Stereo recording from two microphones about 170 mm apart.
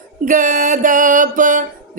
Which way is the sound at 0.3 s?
55° right (ahead or behind).